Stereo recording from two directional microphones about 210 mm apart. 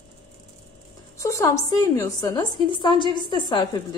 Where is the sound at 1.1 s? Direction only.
15° left (ahead or behind).